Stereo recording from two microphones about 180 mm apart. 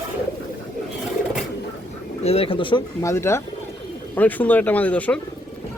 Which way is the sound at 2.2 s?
35° left (ahead or behind).